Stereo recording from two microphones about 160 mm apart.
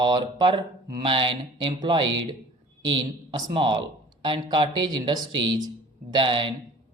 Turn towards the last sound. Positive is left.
turn(degrees=-30)  # may be behind; listen again after turning